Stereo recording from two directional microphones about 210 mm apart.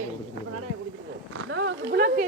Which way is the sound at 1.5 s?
65° right (ahead or behind).